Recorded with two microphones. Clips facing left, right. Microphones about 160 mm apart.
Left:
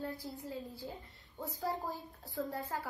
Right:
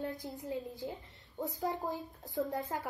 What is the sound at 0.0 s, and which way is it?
A woman's voice, 20° right (ahead or behind).